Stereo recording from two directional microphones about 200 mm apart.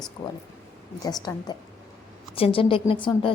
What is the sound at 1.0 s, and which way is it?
A woman's voice, 20° left (ahead or behind).